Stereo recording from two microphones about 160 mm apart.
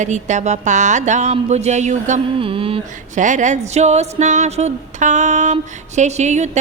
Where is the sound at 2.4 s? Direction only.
35° right (ahead or behind).